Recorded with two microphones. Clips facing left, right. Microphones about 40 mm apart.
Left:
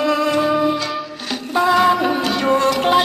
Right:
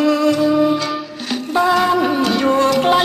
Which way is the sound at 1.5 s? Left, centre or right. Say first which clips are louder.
Even; centre.